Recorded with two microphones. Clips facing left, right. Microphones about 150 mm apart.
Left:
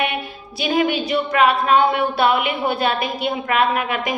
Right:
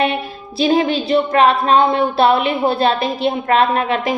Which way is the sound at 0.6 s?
35° right (ahead or behind).